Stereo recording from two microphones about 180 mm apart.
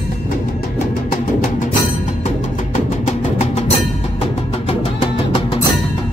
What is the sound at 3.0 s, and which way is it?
Music, 40° left (ahead or behind).